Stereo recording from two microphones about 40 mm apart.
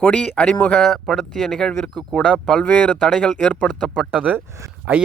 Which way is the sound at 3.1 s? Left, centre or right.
Centre.